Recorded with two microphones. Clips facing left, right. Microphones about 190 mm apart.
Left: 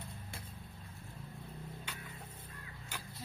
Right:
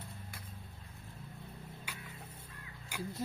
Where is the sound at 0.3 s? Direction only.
25° left (ahead or behind).